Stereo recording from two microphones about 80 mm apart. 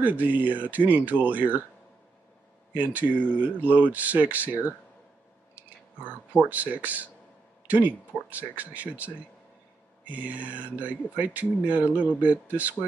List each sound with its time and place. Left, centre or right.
0.0 s speech: right
2.7 s speech: right
6.3 s speech: centre